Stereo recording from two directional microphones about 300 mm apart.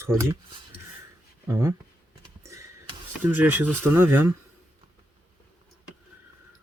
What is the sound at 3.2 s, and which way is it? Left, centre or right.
Speech, centre.